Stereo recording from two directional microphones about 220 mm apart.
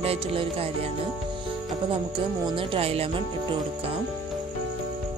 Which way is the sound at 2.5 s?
25° right (ahead or behind).